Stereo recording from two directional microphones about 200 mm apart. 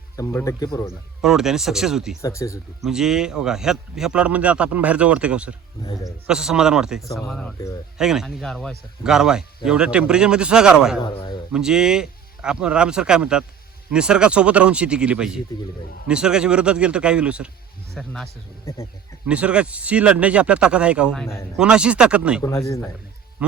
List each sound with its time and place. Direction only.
0.2 s speech: 15° left (ahead or behind)
0.9 s speech: centre (ahead or behind)
2.2 s speech: 15° left (ahead or behind)
2.8 s speech: centre (ahead or behind)
5.8 s a man's voice: 20° left (ahead or behind)
6.1 s speech: 5° right (ahead or behind)
11.0 s a man's voice: 20° left (ahead or behind)
11.5 s speech: 5° right (ahead or behind)
22.4 s speech: 15° left (ahead or behind)
23.4 s speech: 5° right (ahead or behind)